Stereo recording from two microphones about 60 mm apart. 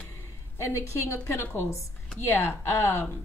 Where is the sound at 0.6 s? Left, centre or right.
Left.